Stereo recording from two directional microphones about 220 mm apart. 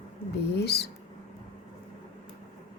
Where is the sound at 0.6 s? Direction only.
50° left (ahead or behind).